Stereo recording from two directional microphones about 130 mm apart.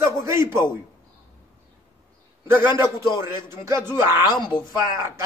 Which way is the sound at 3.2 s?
20° right (ahead or behind).